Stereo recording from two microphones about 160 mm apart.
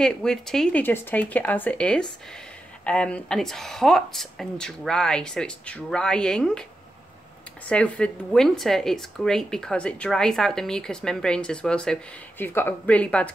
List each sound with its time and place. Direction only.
0.0 s speech: 5° left (ahead or behind)
7.6 s speech: 10° left (ahead or behind)